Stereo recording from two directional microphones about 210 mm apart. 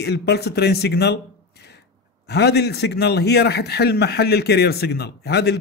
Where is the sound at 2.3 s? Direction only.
50° left (ahead or behind).